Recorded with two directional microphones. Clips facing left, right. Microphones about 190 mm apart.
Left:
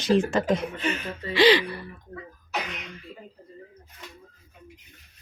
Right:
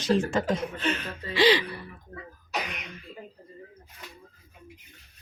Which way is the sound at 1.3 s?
75° left (ahead or behind).